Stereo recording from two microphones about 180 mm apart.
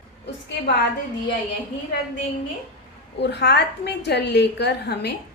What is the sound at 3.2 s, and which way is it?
A woman's voice, 70° left (ahead or behind).